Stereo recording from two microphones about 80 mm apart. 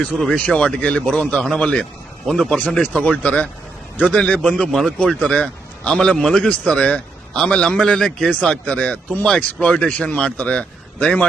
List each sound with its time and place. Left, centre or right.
0.3 s a man's voice: centre
2.8 s a man's voice: centre